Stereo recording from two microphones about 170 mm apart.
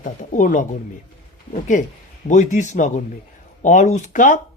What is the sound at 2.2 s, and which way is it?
Speech, 45° left (ahead or behind).